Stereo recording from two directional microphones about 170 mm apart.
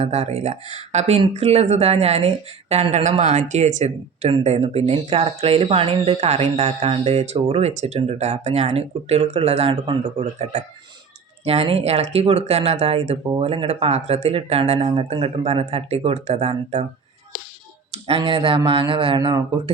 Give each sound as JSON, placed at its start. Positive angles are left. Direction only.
{"t": 0.0, "sound": "speech", "side_deg": -40}
{"t": 17.9, "sound": "speech", "side_deg": -35}